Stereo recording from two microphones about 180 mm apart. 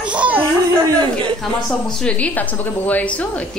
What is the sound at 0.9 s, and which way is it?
Speech, 30° right (ahead or behind).